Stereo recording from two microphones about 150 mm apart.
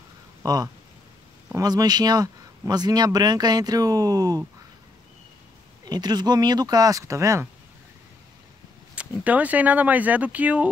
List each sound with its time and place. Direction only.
0.4 s speech: 25° right (ahead or behind)
5.9 s speech: 30° right (ahead or behind)
8.9 s speech: 10° right (ahead or behind)